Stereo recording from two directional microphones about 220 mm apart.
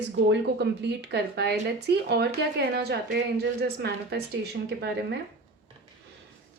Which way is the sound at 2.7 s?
45° right (ahead or behind).